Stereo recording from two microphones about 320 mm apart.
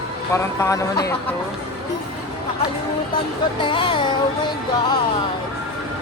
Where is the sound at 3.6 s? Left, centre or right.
Centre.